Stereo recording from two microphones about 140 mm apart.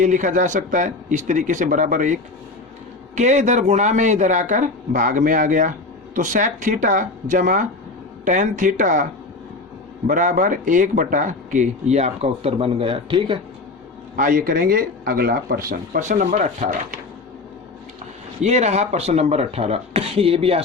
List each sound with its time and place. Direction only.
0.0 s speech: 65° right (ahead or behind)
3.2 s speech: 60° right (ahead or behind)
10.1 s speech: 70° right (ahead or behind); by 13.4 s 35° right (ahead or behind)
14.2 s speech: 80° right; by 17.0 s 65° right (ahead or behind)
18.4 s speech: 50° right (ahead or behind)